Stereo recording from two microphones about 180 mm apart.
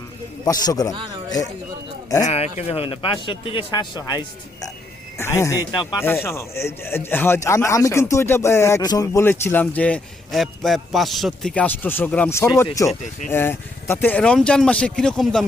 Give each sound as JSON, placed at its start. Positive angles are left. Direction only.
{"t": 0.4, "sound": "speech", "side_deg": 20}
{"t": 2.2, "sound": "speech", "side_deg": 35}